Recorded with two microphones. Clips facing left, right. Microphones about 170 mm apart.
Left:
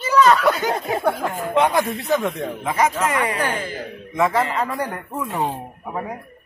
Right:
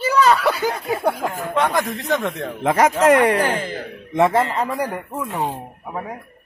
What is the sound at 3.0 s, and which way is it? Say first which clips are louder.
Speech: right 8 dB; 90° right.